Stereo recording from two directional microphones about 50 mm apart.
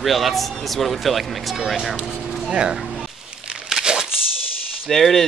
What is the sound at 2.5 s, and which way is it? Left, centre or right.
Speech, centre.